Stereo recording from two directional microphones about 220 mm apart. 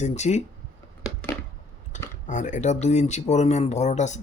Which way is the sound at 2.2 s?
35° left (ahead or behind).